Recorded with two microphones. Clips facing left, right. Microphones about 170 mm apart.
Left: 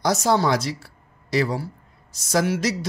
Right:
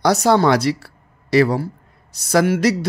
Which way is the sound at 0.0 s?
65° right (ahead or behind).